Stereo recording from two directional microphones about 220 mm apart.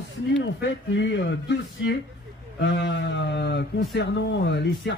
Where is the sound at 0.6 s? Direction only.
55° left (ahead or behind).